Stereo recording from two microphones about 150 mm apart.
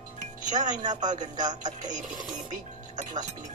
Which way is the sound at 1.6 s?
55° right (ahead or behind).